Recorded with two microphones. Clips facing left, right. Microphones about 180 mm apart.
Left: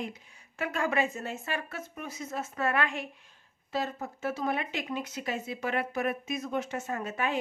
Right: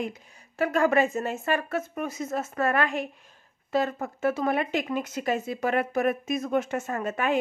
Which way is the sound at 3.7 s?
55° right (ahead or behind).